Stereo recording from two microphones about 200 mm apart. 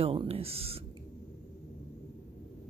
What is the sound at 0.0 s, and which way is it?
Speech, 30° right (ahead or behind).